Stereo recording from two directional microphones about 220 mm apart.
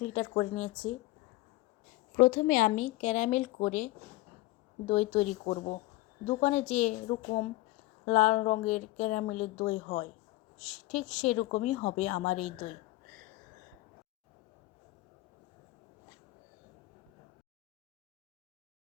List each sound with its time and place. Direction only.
0.0 s a woman's voice: 30° left (ahead or behind)
2.1 s a woman's voice: 40° left (ahead or behind)
13.1 s whispering: 35° right (ahead or behind)